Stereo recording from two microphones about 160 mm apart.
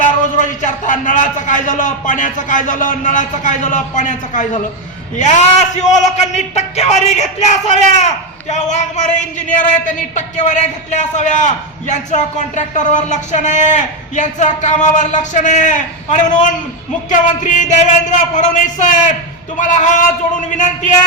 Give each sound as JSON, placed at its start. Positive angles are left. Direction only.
{"t": 0.0, "sound": "a man's voice", "side_deg": 55}